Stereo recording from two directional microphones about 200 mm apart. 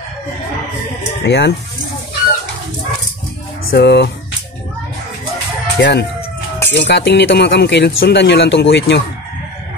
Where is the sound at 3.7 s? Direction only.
55° left (ahead or behind).